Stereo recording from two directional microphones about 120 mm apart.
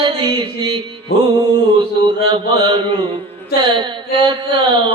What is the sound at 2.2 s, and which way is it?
Mantra, 45° right (ahead or behind).